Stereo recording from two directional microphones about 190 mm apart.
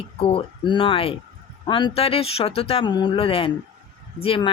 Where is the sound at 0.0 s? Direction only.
30° left (ahead or behind).